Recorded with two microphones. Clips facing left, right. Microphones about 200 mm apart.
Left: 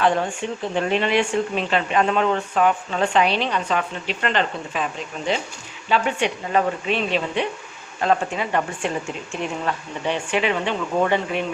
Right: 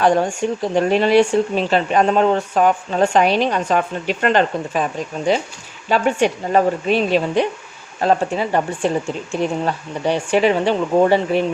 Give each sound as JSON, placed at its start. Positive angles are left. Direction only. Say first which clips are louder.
{"t": 0.0, "sound": "speech", "louder": "right 5 dB", "side_deg": -40}